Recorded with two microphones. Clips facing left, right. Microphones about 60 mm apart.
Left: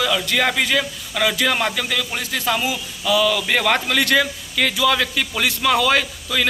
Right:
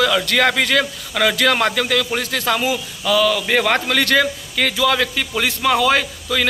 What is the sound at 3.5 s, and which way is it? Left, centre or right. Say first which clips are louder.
A man's voice: right 2 dB; right.